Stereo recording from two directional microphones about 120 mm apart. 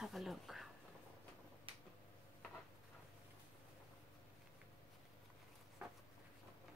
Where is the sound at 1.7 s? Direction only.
45° right (ahead or behind).